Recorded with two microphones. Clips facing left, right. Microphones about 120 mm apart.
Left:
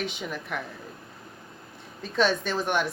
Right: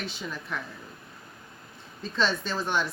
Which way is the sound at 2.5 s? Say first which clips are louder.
Left 2 dB; 15° left (ahead or behind).